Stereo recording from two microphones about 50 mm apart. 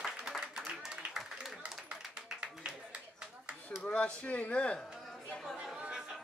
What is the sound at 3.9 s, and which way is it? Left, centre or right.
Speech, left.